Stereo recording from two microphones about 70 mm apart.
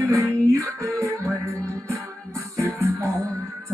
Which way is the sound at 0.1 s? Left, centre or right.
Right.